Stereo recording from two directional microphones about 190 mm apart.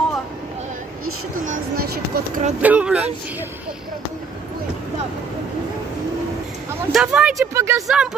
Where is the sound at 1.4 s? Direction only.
45° right (ahead or behind).